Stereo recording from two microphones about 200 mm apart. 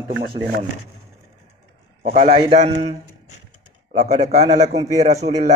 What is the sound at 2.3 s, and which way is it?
Cutlery, 30° right (ahead or behind).